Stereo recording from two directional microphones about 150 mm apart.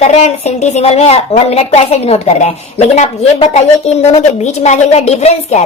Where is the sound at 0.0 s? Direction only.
45° left (ahead or behind).